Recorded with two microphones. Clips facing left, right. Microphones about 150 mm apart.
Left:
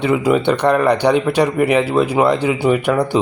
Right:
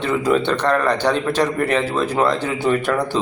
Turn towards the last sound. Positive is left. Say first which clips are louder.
# left 3 dB
turn(degrees=15)  # may be behind; listen again after turning